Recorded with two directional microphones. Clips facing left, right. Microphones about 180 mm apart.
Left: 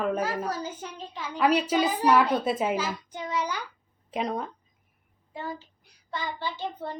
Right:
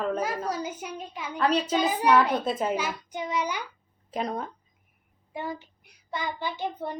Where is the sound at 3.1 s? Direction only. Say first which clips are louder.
Right 1 dB; 15° right (ahead or behind).